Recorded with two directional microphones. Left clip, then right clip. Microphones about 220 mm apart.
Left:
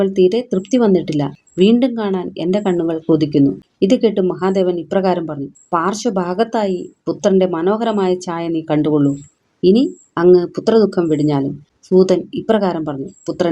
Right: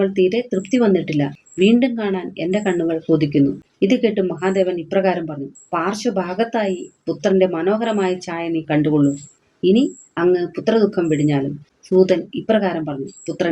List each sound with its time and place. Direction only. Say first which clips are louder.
0.0 s speech: left 3 dB; 40° left (ahead or behind)